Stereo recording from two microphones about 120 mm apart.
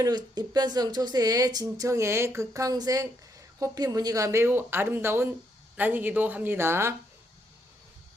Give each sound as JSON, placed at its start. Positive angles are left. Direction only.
{"t": 0.0, "sound": "speech", "side_deg": -35}